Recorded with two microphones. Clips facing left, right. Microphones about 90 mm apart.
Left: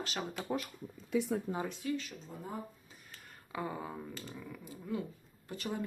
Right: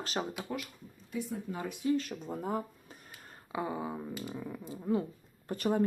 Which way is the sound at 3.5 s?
15° right (ahead or behind).